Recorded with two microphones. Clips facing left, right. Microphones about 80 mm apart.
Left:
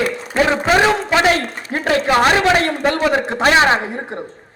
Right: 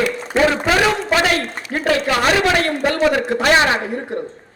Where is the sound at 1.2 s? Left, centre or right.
Left.